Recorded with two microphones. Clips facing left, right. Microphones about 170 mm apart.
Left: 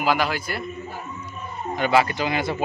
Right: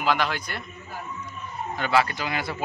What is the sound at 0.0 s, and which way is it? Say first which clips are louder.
Speech: left 3 dB; 5° left (ahead or behind).